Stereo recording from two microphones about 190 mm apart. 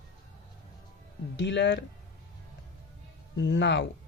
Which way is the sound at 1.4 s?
65° left (ahead or behind).